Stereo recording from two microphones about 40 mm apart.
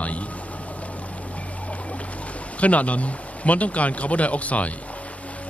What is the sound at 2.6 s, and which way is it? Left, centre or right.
Speech, left.